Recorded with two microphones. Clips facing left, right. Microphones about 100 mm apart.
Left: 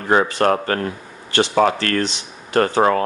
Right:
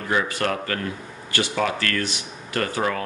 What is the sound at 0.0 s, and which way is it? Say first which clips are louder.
Speech: left 7 dB; 40° left (ahead or behind).